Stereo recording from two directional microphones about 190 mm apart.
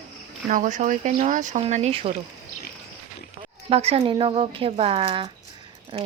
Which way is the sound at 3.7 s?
30° right (ahead or behind).